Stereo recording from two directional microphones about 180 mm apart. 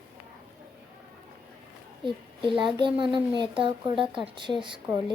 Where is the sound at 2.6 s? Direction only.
25° right (ahead or behind).